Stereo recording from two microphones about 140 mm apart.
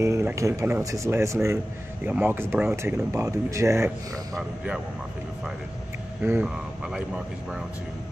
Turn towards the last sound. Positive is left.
turn(degrees=-5)  # may be behind; listen again after turning